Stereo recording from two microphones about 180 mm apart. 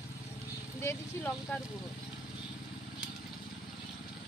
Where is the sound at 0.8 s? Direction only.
10° left (ahead or behind).